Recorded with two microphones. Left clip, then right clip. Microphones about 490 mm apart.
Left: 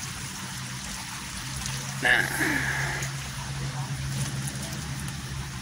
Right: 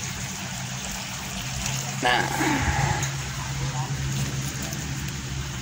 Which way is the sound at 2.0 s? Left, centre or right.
Left.